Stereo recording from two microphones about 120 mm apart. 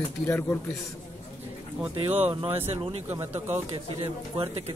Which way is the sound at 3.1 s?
20° right (ahead or behind).